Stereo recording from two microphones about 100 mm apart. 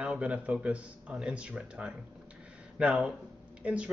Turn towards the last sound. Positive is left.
turn(degrees=-15)  # may be behind; listen again after turning